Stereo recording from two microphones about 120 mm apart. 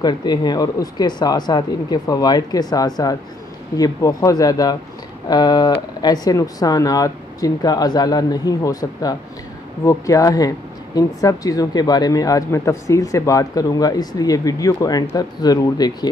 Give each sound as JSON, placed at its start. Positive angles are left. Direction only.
{"t": 0.0, "sound": "speech", "side_deg": 35}